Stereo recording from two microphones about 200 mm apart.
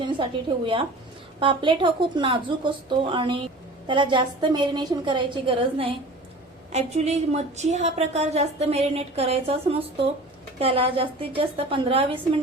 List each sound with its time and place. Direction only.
0.1 s a woman's voice: 25° right (ahead or behind)